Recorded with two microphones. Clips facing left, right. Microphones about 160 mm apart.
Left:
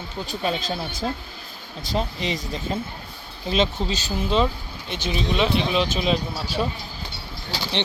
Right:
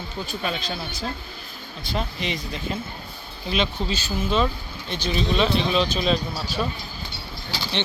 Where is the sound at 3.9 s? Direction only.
20° left (ahead or behind).